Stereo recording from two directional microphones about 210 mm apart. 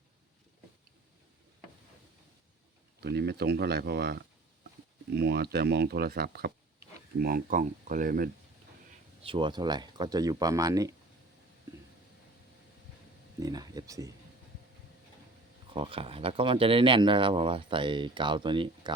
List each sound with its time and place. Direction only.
3.0 s speech: 50° right (ahead or behind)
9.2 s speech: 25° right (ahead or behind)
13.4 s a sound: 20° right (ahead or behind)
15.7 s speech: 25° right (ahead or behind)